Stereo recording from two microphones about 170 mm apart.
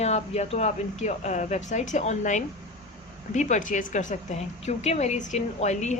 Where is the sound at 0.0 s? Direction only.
40° left (ahead or behind).